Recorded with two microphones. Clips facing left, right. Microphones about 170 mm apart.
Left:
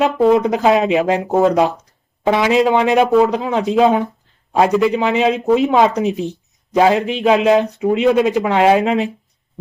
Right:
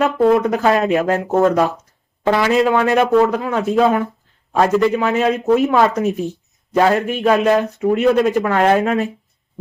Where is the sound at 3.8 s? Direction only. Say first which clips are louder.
Left 2 dB; 20° left (ahead or behind).